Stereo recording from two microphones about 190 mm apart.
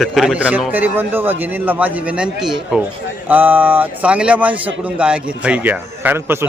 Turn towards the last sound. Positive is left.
turn(degrees=-10)  # may be behind; listen again after turning